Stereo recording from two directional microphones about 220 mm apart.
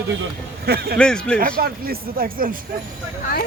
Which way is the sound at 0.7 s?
45° right (ahead or behind).